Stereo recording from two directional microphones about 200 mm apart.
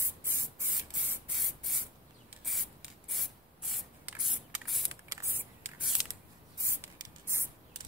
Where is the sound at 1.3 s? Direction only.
Centre (ahead or behind).